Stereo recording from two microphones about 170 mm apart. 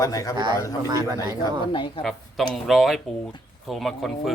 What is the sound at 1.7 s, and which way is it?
Speech, 30° left (ahead or behind).